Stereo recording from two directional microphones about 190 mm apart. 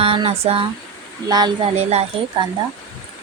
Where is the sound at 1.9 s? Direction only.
30° right (ahead or behind).